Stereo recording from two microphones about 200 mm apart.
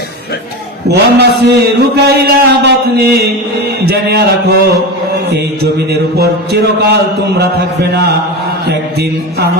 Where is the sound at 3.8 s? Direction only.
55° right (ahead or behind).